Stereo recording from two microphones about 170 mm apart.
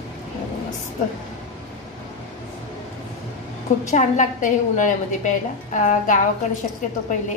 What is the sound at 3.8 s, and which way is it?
A woman's voice, 45° left (ahead or behind).